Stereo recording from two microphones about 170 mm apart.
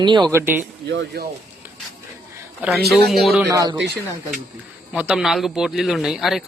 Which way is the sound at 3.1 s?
Centre (ahead or behind).